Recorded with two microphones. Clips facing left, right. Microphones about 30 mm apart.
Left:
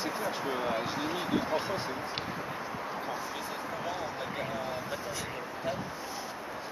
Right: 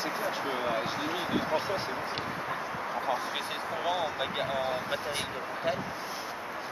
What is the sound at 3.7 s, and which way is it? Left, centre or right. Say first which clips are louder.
Speech: right 8 dB; right.